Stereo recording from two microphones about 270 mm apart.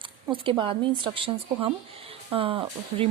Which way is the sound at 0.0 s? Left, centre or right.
Centre.